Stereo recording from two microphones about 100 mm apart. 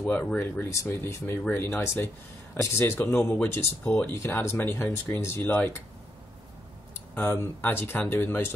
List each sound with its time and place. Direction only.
0.0 s speech: 15° left (ahead or behind)
7.2 s speech: 20° left (ahead or behind)